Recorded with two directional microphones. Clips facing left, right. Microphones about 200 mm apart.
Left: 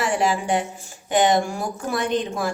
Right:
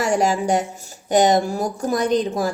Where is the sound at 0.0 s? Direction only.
40° right (ahead or behind).